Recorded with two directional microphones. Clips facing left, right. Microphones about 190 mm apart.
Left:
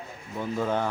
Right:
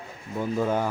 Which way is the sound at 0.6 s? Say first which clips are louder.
Right 1 dB; 10° right (ahead or behind).